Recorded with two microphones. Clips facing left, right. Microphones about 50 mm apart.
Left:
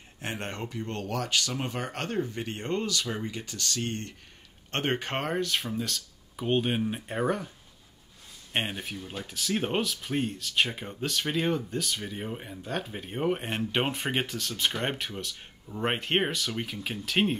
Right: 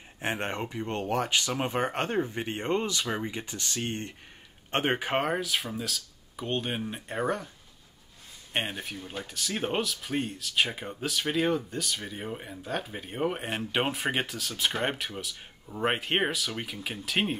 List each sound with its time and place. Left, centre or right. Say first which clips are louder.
0.2 s speech: right 4 dB; right; by 7.5 s centre
8.5 s speech: left 1 dB; centre